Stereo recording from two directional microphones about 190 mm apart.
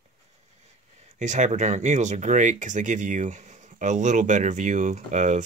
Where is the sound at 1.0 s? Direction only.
40° right (ahead or behind).